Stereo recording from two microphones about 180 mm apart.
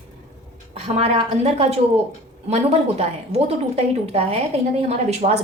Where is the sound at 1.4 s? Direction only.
35° right (ahead or behind).